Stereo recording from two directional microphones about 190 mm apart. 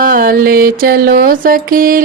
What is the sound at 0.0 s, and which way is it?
Music, 45° right (ahead or behind).